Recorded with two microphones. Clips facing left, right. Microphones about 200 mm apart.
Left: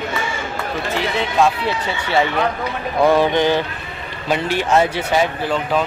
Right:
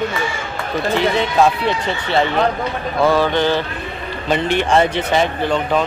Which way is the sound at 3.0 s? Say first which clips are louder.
Left 1 dB; 15° left (ahead or behind).